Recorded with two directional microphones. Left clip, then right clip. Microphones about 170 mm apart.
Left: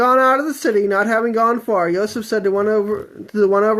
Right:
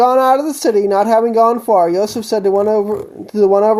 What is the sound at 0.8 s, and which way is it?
Speech, 15° right (ahead or behind).